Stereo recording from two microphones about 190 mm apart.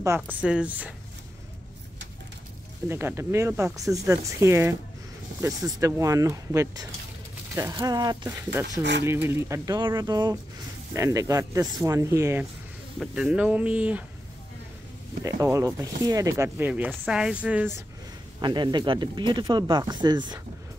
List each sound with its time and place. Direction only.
0.0 s speech: 10° right (ahead or behind)
2.9 s speech: 15° right (ahead or behind)
15.2 s speech: 15° right (ahead or behind)
18.4 s speech: 25° right (ahead or behind)